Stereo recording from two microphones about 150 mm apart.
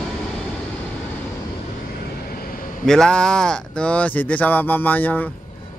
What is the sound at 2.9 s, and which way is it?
Speech, 5° left (ahead or behind).